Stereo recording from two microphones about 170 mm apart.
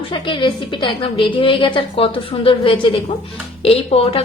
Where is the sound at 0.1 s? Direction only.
30° left (ahead or behind).